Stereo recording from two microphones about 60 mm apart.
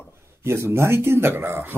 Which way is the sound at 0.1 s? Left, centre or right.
Right.